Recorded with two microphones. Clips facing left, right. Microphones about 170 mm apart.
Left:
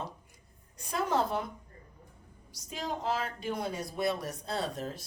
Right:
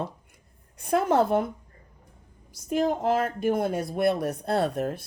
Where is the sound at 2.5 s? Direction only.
55° right (ahead or behind).